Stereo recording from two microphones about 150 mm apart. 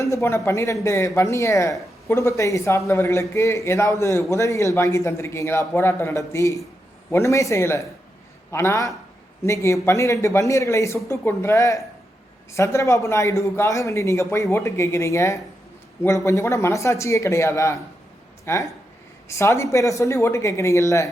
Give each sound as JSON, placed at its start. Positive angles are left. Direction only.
{"t": 0.0, "sound": "a man's voice", "side_deg": 20}